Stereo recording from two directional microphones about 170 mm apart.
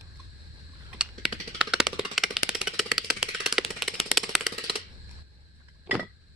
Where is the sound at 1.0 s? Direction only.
5° right (ahead or behind).